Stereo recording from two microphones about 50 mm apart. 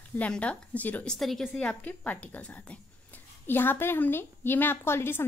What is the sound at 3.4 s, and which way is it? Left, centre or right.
A woman's voice, left.